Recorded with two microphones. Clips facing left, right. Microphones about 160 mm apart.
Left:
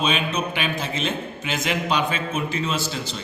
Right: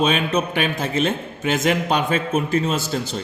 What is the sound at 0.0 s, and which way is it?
A man's voice, 45° right (ahead or behind).